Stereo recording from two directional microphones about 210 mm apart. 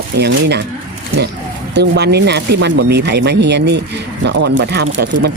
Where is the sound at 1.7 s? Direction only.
50° right (ahead or behind).